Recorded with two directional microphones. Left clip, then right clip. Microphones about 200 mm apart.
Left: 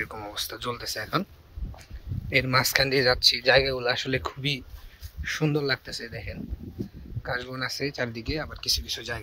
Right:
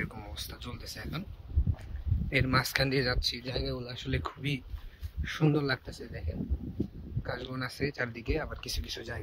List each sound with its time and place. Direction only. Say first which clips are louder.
0.0 s speech: left 8 dB; 5° right (ahead or behind)
2.2 s speech: left 6 dB; 10° right (ahead or behind)
3.6 s speech: left 11 dB; 15° left (ahead or behind)
3.9 s speech: left 10 dB; centre (ahead or behind)
4.2 s speech: left 6 dB; 15° right (ahead or behind)